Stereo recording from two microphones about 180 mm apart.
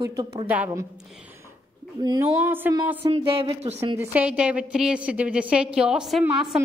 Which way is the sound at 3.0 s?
35° right (ahead or behind).